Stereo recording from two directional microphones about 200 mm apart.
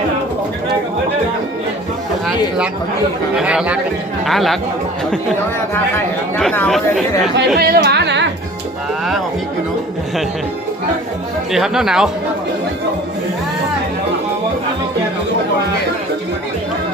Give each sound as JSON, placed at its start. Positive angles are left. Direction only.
{"t": 3.3, "sound": "speech", "side_deg": -5}
{"t": 6.3, "sound": "speech", "side_deg": 5}
{"t": 7.3, "sound": "speech", "side_deg": -50}
{"t": 11.5, "sound": "speech", "side_deg": 0}